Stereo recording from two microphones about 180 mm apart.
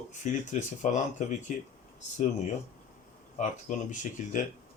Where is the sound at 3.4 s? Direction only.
45° left (ahead or behind).